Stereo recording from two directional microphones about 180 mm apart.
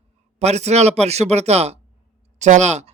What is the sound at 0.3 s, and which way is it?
Speech, 35° right (ahead or behind).